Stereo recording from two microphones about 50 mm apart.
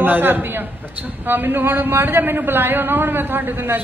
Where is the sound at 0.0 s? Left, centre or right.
Right.